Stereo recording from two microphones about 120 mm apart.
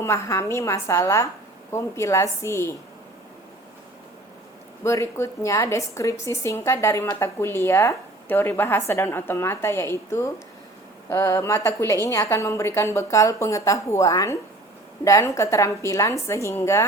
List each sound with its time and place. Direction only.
0.0 s a woman's voice: 25° left (ahead or behind)
4.8 s a woman's voice: 25° left (ahead or behind)